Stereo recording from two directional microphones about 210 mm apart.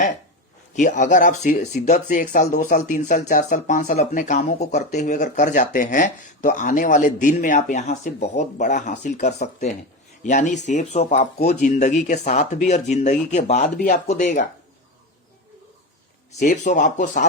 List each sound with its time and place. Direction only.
0.7 s speech: 35° left (ahead or behind)
16.4 s speech: 35° left (ahead or behind)